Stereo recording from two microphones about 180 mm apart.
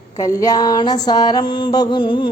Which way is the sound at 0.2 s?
20° left (ahead or behind).